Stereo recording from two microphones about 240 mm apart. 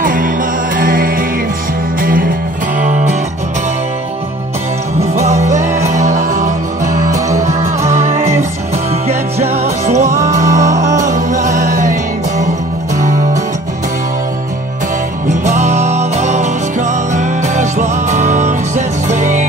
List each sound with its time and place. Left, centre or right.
0.0 s music: right
5.2 s music: right
6.8 s music: centre
7.9 s music: right
8.2 s music: centre
9.0 s music: right
10.0 s music: centre
11.1 s music: right
15.2 s music: right